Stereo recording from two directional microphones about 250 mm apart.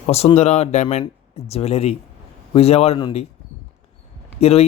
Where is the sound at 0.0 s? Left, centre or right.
Left.